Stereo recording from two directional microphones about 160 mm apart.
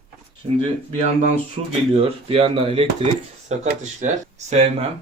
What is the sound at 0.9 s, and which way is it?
Speech, 40° right (ahead or behind).